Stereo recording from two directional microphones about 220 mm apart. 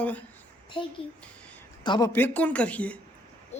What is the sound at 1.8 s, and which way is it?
Speech, 20° left (ahead or behind).